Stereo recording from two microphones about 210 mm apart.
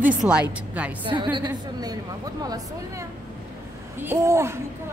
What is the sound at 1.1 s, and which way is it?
A woman's voice, 20° right (ahead or behind).